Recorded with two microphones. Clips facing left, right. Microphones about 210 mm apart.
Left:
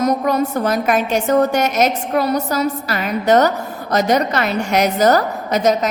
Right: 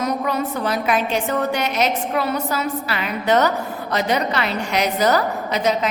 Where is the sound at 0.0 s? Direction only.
45° left (ahead or behind).